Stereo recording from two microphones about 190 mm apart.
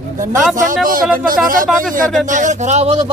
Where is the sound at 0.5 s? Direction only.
45° right (ahead or behind).